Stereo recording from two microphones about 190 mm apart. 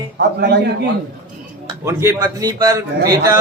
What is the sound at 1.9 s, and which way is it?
A man's voice, 15° right (ahead or behind).